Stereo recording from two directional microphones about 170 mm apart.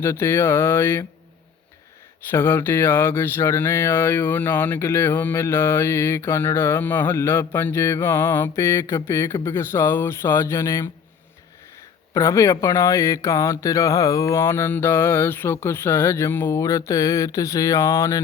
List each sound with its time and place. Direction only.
0.0 s speech: 15° left (ahead or behind)
2.3 s speech: 15° left (ahead or behind)
12.1 s speech: 15° left (ahead or behind)